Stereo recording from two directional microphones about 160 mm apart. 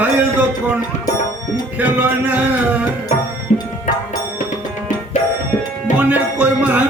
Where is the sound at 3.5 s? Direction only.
45° left (ahead or behind).